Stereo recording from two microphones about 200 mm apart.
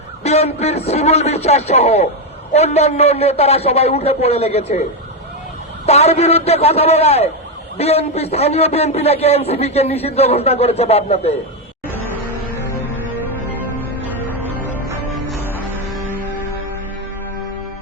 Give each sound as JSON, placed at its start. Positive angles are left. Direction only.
{"t": 0.2, "sound": "a man's voice", "side_deg": 30}
{"t": 5.8, "sound": "a man's voice", "side_deg": 30}
{"t": 14.7, "sound": "music", "side_deg": 5}